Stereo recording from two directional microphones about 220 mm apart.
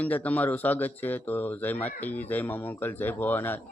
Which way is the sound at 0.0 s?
5° left (ahead or behind).